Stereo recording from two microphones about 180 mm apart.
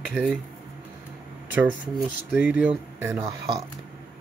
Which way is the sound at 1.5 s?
10° right (ahead or behind).